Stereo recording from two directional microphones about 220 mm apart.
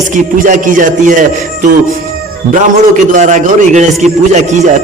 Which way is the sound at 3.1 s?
35° right (ahead or behind).